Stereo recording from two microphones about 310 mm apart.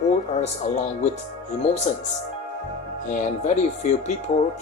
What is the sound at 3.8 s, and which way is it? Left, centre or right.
Speech, left.